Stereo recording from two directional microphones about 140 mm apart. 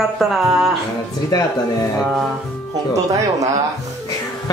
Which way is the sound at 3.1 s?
25° right (ahead or behind).